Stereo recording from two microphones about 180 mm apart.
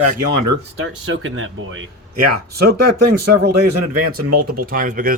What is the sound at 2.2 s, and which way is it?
Speech, 60° right (ahead or behind).